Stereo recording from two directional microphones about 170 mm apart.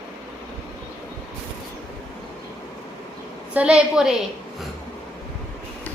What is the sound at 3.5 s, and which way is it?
Speech, 5° right (ahead or behind).